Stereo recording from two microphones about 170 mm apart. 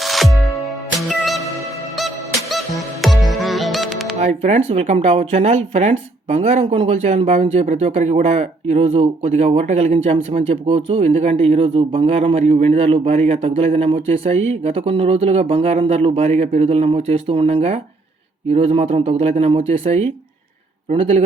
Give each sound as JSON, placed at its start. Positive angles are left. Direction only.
{"t": 0.0, "sound": "music", "side_deg": 0}
{"t": 2.0, "sound": "music", "side_deg": 0}
{"t": 4.2, "sound": "speech", "side_deg": -40}